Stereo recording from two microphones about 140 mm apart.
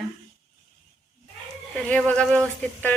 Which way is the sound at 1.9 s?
5° left (ahead or behind).